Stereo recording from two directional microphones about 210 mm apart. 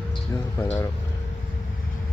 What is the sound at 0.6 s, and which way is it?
Speech, 10° left (ahead or behind).